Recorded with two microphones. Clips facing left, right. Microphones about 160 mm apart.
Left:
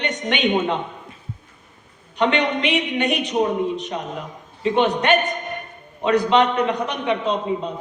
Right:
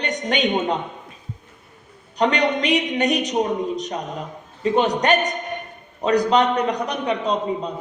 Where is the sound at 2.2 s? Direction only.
40° right (ahead or behind).